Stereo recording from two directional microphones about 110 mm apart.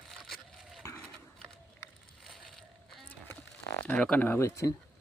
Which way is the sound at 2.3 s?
Centre (ahead or behind).